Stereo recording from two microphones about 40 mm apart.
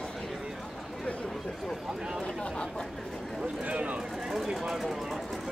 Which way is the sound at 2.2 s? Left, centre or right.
Left.